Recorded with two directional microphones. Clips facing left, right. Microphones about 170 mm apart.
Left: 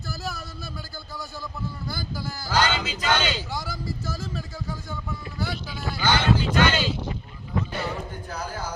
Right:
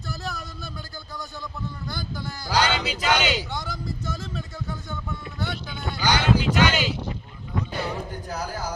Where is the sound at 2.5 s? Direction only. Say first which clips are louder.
Right 1 dB; 15° right (ahead or behind).